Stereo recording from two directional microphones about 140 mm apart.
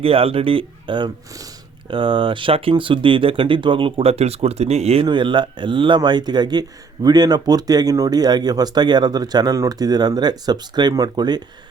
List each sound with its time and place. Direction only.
0.0 s speech: 40° right (ahead or behind)
5.0 s speech: 35° right (ahead or behind)